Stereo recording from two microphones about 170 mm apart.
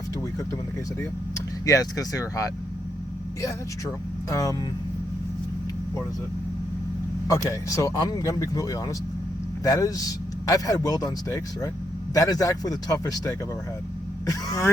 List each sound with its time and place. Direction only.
1.6 s a man's voice: 20° left (ahead or behind)
4.3 s a man's voice: 20° left (ahead or behind)
7.3 s a man's voice: 20° left (ahead or behind)